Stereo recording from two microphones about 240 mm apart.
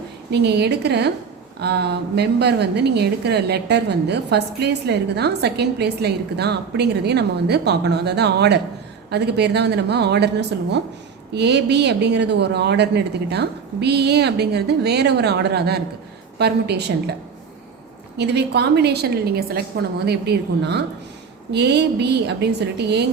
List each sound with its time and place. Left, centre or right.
0.3 s a woman's voice: right
18.2 s a woman's voice: right